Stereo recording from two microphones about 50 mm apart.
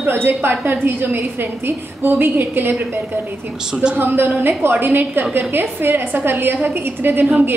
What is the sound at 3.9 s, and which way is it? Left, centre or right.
A woman's voice, right.